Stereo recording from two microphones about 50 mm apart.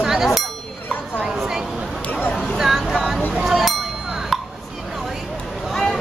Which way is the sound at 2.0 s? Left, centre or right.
Left.